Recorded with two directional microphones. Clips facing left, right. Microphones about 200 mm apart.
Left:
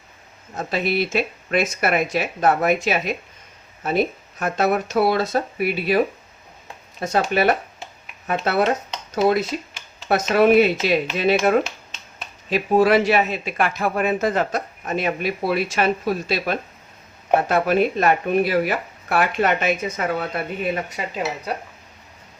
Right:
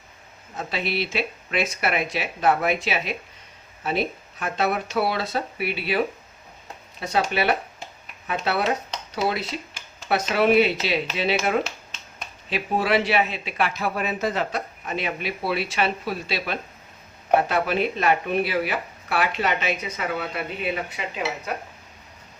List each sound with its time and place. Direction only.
0.5 s speech: 45° left (ahead or behind)
7.0 s speech: 45° left (ahead or behind)